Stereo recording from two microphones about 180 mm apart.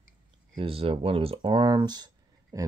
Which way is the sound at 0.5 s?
30° right (ahead or behind).